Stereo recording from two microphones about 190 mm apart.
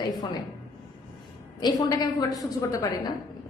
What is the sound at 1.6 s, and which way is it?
A woman's voice, 20° left (ahead or behind).